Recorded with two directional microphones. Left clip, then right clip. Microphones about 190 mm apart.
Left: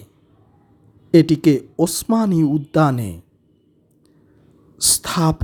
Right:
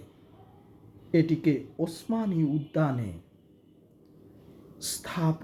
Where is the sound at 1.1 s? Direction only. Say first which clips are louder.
Left 11 dB; 35° left (ahead or behind).